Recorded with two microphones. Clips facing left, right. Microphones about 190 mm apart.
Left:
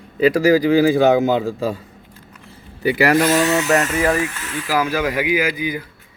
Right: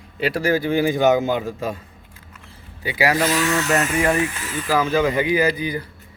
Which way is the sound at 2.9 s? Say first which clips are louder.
Left 4 dB; 60° left (ahead or behind).